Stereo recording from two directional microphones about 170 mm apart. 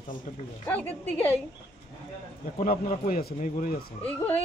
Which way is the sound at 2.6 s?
50° left (ahead or behind).